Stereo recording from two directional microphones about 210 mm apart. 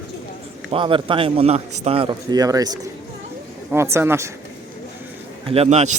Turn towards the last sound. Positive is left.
turn(degrees=-30)  # may be behind; listen again after turning